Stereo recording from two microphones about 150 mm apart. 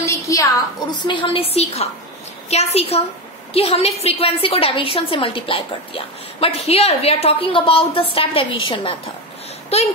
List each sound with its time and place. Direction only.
0.0 s a woman's voice: 20° left (ahead or behind)
9.7 s a woman's voice: 45° left (ahead or behind)